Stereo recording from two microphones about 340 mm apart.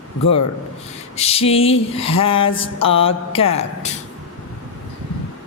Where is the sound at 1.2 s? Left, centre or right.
Centre.